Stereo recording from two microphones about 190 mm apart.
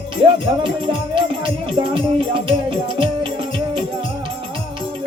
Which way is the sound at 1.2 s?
25° right (ahead or behind).